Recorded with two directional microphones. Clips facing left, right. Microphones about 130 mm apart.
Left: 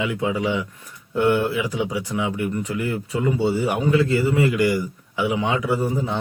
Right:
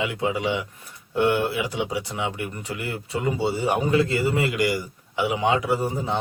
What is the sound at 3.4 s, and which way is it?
Speech, 15° right (ahead or behind).